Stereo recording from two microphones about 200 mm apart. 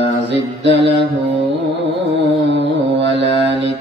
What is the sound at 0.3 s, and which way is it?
Mantra, 60° right (ahead or behind).